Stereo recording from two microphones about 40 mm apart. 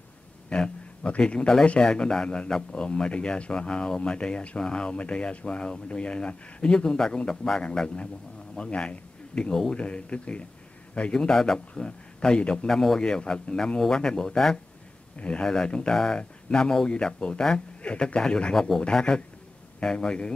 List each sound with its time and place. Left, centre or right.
0.5 s a man's voice: left
11.2 s a man's voice: centre
12.6 s a man's voice: centre
15.1 s speech: left
15.4 s a man's voice: centre